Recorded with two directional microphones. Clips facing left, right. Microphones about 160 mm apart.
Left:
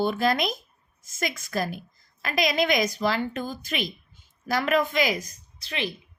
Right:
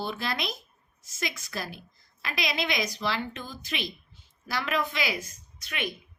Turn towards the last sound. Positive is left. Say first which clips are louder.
# left 3 dB
turn(degrees=30)  # may be behind; listen again after turning